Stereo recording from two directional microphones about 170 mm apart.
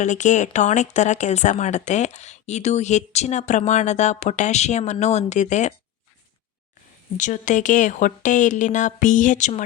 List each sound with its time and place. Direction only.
0.0 s speech: 45° left (ahead or behind)
7.2 s speech: 45° left (ahead or behind)